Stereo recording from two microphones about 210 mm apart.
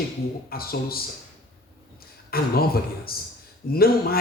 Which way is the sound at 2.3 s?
45° left (ahead or behind).